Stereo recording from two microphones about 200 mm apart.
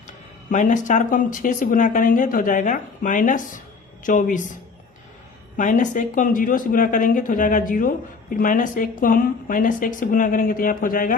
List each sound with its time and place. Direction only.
0.5 s speech: 40° left (ahead or behind)
5.5 s speech: 40° left (ahead or behind)